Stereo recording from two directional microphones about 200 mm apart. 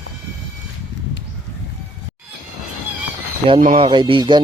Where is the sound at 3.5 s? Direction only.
40° right (ahead or behind).